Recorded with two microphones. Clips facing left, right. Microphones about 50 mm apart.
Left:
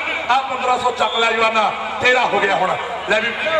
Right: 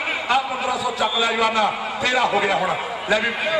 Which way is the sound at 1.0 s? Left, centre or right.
Left.